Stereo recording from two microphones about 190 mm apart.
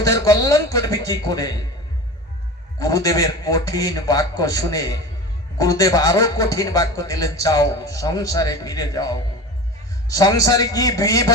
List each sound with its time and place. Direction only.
0.0 s a man's voice: 15° left (ahead or behind)
2.7 s a man's voice: 20° left (ahead or behind)